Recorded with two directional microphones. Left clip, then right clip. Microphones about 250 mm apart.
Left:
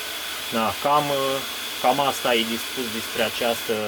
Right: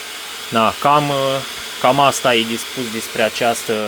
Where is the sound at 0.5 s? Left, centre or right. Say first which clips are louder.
Right 7 dB; right.